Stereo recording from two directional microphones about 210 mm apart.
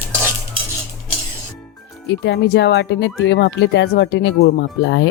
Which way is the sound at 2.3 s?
55° left (ahead or behind).